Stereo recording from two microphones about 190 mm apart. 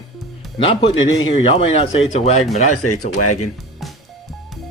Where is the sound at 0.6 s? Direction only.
30° left (ahead or behind).